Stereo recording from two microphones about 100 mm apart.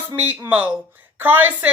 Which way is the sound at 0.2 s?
15° right (ahead or behind).